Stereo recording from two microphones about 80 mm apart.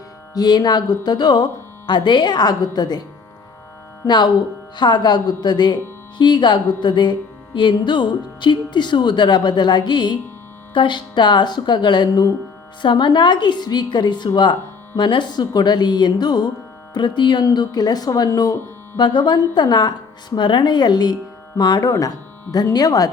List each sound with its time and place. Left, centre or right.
0.3 s speech: left
1.9 s speech: left
4.0 s music: left
12.8 s music: left
14.9 s speech: left
16.9 s music: left
17.4 s speech: left
18.9 s music: left
20.3 s speech: left